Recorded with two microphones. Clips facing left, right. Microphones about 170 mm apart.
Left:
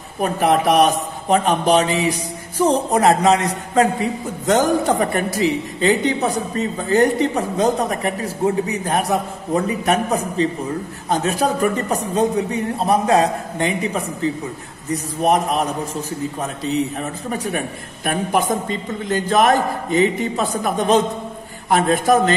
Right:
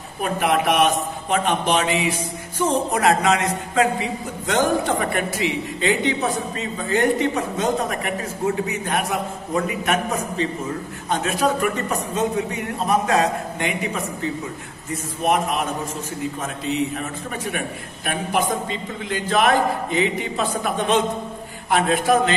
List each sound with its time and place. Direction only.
0.2 s a man's voice: 35° left (ahead or behind)
14.9 s a man's voice: 35° left (ahead or behind)